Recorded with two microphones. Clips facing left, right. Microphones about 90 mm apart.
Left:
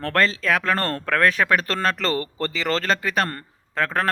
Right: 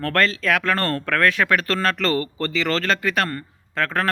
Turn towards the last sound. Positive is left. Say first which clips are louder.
# right 3 dB
turn(degrees=40)  # may be behind; listen again after turning